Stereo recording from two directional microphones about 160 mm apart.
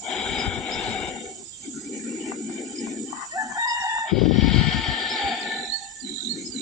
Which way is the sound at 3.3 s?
20° right (ahead or behind).